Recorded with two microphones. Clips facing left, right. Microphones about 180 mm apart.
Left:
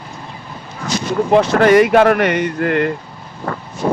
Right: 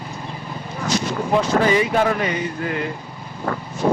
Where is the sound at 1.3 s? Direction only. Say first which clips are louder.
Left 7 dB; 70° left (ahead or behind).